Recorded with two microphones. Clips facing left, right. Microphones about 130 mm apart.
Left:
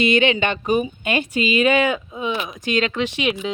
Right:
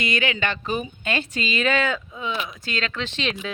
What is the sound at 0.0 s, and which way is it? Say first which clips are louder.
A woman's voice: left 7 dB; 25° left (ahead or behind).